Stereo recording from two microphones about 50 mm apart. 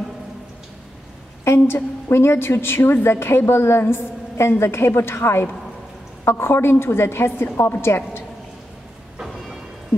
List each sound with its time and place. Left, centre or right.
1.4 s a woman's voice: left